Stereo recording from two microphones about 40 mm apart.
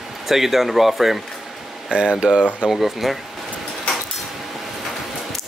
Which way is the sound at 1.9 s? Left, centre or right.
Right.